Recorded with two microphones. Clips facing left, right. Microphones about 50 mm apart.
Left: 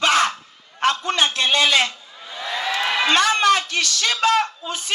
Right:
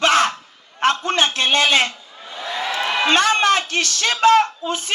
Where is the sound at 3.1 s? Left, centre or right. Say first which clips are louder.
Right 1 dB; right.